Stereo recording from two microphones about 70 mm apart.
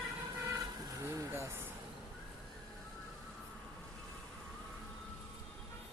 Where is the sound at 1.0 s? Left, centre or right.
Right.